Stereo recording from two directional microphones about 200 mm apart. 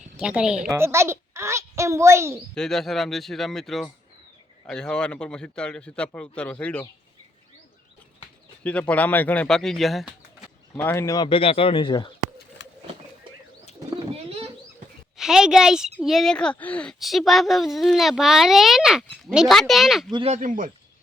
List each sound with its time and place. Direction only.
0.2 s a child's voice: 5° right (ahead or behind)
2.6 s speech: centre (ahead or behind)
8.6 s speech: 5° left (ahead or behind)
10.8 s speech: 15° left (ahead or behind)
12.6 s vehicle: 60° left (ahead or behind)
13.9 s pigeon: 30° right (ahead or behind)
15.2 s speech: 5° right (ahead or behind)
20.1 s speech: 25° right (ahead or behind)
20.3 s speech: 40° right (ahead or behind)